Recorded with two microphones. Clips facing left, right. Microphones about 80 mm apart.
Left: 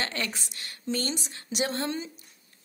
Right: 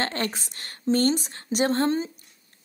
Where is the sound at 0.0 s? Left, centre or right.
Right.